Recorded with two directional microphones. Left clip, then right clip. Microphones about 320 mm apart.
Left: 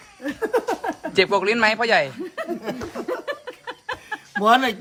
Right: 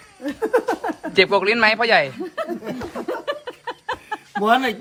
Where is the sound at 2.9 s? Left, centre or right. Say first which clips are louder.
Right 4 dB; centre.